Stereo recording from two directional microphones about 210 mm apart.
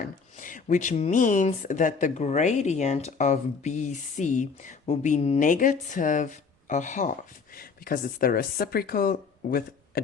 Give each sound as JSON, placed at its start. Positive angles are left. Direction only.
{"t": 0.0, "sound": "speech", "side_deg": 40}